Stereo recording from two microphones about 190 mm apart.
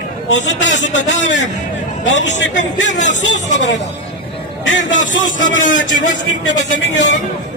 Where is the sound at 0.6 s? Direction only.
40° left (ahead or behind).